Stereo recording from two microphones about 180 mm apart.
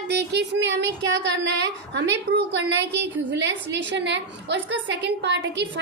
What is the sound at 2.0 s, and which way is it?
A woman's voice, 75° right (ahead or behind).